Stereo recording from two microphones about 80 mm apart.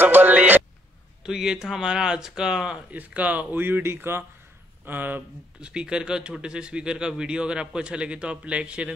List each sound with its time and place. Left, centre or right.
0.0 s speech: right
1.2 s speech: centre; by 5.7 s right
5.7 s speech: centre